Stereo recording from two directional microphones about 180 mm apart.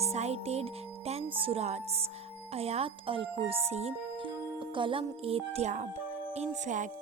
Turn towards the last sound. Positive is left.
turn(degrees=-35)  # may be behind; listen again after turning